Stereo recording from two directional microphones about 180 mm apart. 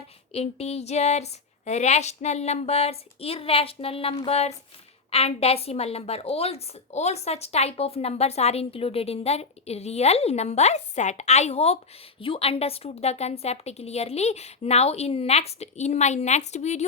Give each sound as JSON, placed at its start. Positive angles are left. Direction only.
{"t": 0.3, "sound": "a woman's voice", "side_deg": 35}